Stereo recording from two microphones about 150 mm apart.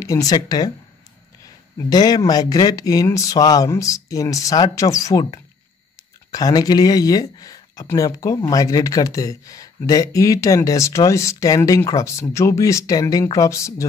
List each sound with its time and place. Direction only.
0.0 s speech: 25° left (ahead or behind)